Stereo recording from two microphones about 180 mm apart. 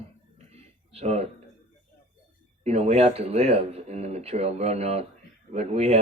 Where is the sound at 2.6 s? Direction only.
35° right (ahead or behind).